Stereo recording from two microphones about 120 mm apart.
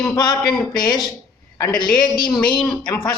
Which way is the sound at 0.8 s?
35° left (ahead or behind).